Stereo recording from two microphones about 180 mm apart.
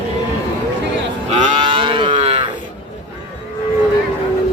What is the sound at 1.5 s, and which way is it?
Moo, 30° right (ahead or behind).